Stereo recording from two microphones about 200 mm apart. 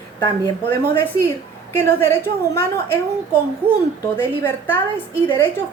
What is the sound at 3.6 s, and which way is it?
Speech, 10° right (ahead or behind).